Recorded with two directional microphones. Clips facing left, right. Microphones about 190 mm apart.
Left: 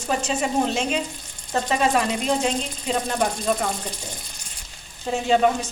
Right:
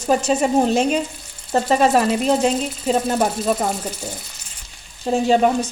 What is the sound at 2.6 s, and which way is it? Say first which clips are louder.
Speech: right 6 dB; 5° right (ahead or behind).